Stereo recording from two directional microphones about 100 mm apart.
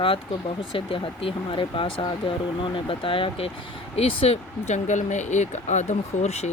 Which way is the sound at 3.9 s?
80° left.